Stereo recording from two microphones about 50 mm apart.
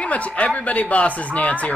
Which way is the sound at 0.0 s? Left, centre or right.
Left.